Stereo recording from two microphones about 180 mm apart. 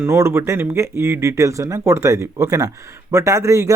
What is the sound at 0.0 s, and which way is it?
A man's voice, 15° right (ahead or behind).